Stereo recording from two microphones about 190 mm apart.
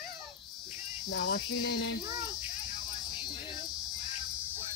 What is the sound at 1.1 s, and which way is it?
Cricket, 75° left (ahead or behind).